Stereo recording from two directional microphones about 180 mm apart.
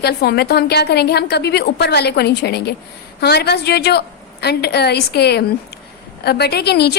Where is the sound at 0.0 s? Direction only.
60° left (ahead or behind).